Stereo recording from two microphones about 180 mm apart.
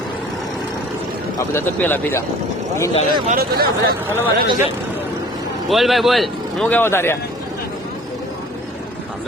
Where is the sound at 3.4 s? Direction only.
60° right (ahead or behind).